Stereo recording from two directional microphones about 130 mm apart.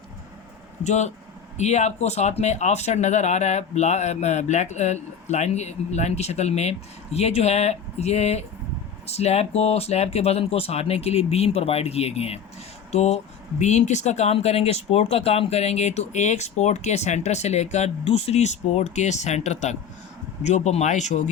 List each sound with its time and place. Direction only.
0.9 s speech: 65° left (ahead or behind)